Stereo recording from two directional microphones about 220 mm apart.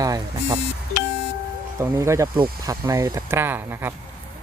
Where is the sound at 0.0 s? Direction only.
20° right (ahead or behind).